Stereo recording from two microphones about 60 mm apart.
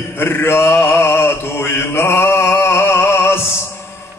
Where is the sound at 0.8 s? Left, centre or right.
Left.